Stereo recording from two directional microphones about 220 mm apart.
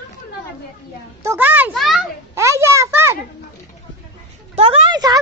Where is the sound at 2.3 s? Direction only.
15° right (ahead or behind).